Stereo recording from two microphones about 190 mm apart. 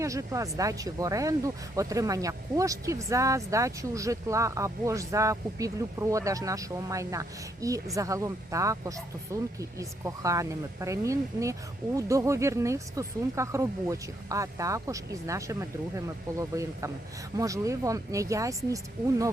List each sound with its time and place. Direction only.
0.0 s speech: 15° right (ahead or behind)